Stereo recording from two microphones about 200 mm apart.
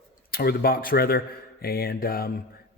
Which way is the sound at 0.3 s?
50° left (ahead or behind).